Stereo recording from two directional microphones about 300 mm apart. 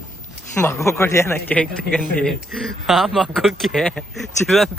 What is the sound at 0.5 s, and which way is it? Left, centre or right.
A man's voice, centre.